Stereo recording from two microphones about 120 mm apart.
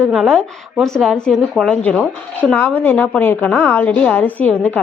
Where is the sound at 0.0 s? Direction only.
Centre (ahead or behind).